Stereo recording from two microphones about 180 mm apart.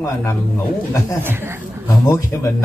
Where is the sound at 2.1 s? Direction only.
15° left (ahead or behind).